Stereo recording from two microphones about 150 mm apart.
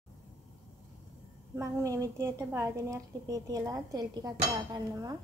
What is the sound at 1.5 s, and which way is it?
A woman's voice, 20° right (ahead or behind).